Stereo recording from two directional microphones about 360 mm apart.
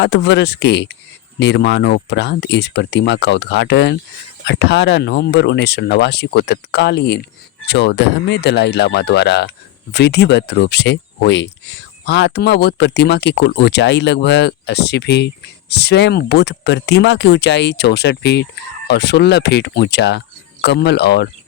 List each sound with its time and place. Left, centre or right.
0.0 s speech: left